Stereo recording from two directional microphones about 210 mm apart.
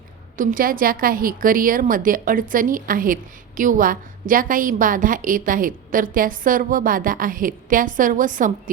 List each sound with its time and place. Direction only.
0.3 s a woman's voice: 40° right (ahead or behind)